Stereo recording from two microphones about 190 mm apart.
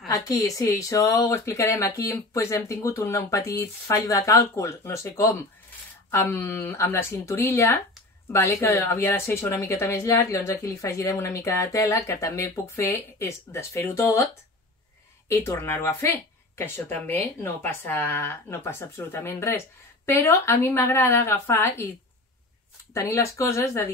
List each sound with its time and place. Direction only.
0.1 s speech: 20° left (ahead or behind)
15.2 s speech: 15° left (ahead or behind)
22.9 s speech: 15° left (ahead or behind)